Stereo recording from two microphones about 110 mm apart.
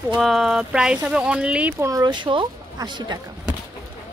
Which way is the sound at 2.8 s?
40° right (ahead or behind).